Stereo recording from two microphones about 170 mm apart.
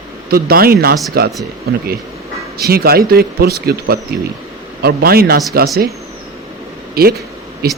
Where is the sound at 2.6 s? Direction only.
65° right (ahead or behind).